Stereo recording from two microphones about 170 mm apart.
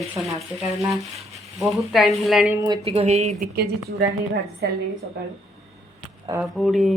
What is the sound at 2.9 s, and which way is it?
Speech, 40° right (ahead or behind).